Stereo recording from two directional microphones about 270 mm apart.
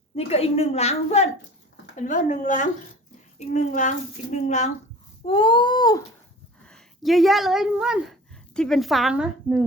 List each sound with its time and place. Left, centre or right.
0.2 s a child's voice: left
5.2 s a sound: centre
6.7 s a woman's voice: centre